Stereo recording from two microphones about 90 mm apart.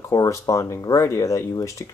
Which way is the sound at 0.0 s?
35° left (ahead or behind).